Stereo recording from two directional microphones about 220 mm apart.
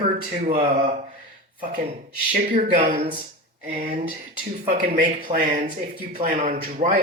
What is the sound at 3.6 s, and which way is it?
Speech, 35° right (ahead or behind).